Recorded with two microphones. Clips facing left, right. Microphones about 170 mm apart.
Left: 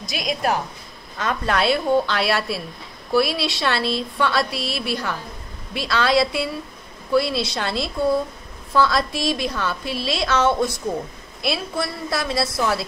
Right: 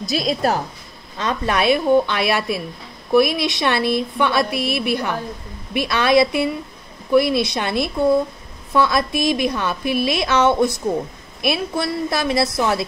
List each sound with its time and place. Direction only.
0.1 s a woman's voice: 35° right (ahead or behind)
1.5 s a woman's voice: 15° right (ahead or behind)